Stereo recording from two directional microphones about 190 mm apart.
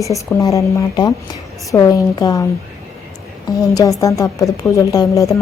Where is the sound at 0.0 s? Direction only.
15° left (ahead or behind).